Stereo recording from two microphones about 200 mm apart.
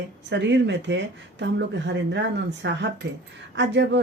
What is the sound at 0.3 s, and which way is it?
Speech, 60° right (ahead or behind).